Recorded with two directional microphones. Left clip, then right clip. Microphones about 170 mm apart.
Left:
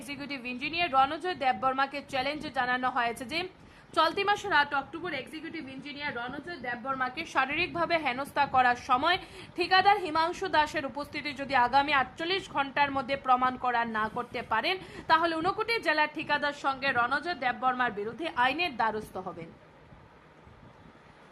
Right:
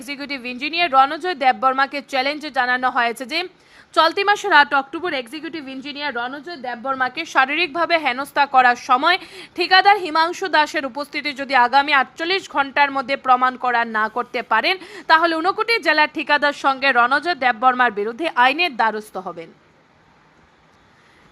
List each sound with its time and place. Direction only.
0.0 s a woman's voice: 25° right (ahead or behind)
4.4 s a woman's voice: 50° right (ahead or behind)
6.9 s a woman's voice: 30° right (ahead or behind)